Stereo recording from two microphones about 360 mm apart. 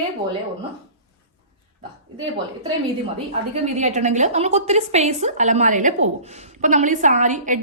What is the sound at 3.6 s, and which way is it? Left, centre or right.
A woman's voice, centre.